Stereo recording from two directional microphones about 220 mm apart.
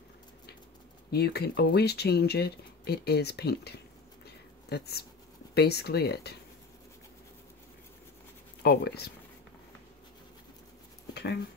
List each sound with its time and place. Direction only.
1.1 s speech: 45° left (ahead or behind)
8.6 s speech: 45° left (ahead or behind)